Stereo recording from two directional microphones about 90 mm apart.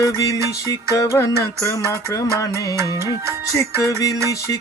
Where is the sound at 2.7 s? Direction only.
35° right (ahead or behind).